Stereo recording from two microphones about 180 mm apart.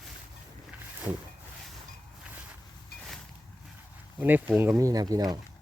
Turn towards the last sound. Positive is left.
turn(degrees=-20)  # may be behind; listen again after turning